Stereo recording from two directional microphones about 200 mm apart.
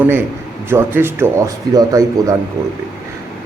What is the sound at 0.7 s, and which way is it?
A man's voice, 10° right (ahead or behind).